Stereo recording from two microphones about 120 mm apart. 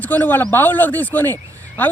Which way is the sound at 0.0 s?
15° left (ahead or behind).